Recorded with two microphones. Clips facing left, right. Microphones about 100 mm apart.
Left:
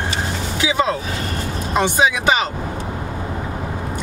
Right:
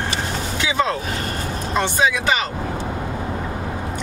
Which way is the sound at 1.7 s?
15° left (ahead or behind).